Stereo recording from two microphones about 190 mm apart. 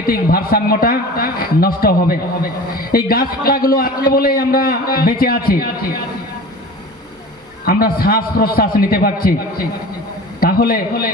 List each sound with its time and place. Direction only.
0.1 s a man's voice: 50° left (ahead or behind)
7.6 s a man's voice: 50° left (ahead or behind)
10.4 s a man's voice: 50° left (ahead or behind)